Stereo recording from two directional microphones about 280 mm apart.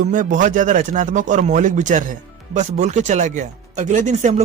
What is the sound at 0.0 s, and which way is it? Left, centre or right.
Speech, right.